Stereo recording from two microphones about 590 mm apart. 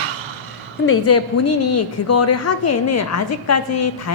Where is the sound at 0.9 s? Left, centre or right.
Left.